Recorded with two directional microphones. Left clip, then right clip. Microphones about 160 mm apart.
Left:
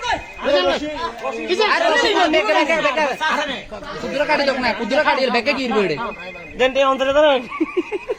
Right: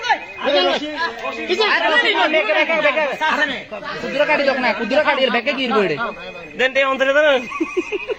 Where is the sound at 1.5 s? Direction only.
10° right (ahead or behind).